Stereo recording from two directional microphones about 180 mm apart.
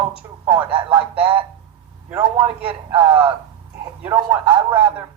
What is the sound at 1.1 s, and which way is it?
Speech, 30° right (ahead or behind).